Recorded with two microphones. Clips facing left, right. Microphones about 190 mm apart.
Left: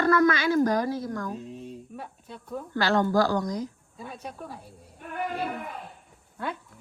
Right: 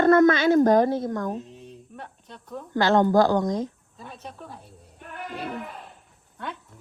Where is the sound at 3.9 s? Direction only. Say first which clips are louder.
Left 2 dB; 5° left (ahead or behind).